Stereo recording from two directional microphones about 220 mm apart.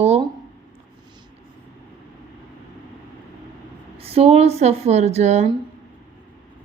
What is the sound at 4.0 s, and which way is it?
Speech, 25° right (ahead or behind).